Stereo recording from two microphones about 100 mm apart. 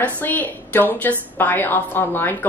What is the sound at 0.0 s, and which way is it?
A woman's voice, 15° left (ahead or behind).